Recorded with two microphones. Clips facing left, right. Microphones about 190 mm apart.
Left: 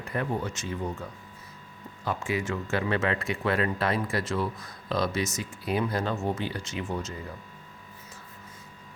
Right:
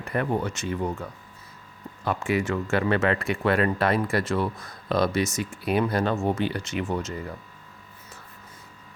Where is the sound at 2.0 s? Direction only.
65° right (ahead or behind).